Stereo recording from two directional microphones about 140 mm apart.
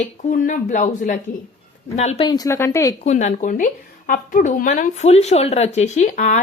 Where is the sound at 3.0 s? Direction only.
55° left (ahead or behind).